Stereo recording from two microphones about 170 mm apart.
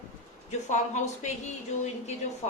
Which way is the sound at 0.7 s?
45° left (ahead or behind).